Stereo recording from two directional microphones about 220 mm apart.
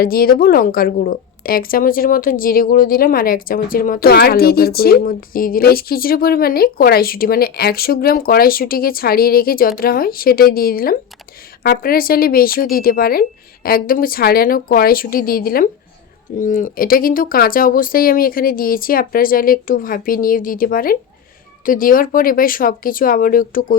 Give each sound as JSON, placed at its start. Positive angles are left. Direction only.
{"t": 0.0, "sound": "a woman's voice", "side_deg": 40}